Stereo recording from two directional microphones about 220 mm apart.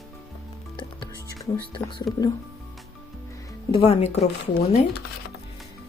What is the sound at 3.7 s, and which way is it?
Speech, 25° left (ahead or behind).